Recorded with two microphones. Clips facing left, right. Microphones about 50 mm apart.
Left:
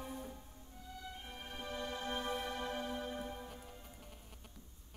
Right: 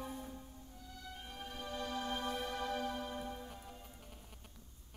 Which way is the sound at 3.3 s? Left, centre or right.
Centre.